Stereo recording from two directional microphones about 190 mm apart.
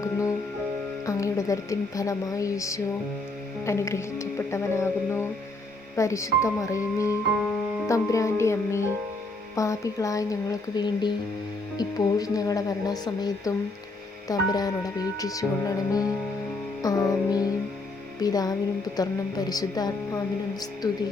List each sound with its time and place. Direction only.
0.0 s music: 15° left (ahead or behind)
1.0 s speech: 15° left (ahead or behind)
14.5 s speech: 20° left (ahead or behind)